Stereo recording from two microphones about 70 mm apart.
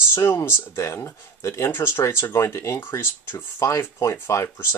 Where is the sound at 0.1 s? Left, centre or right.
Left.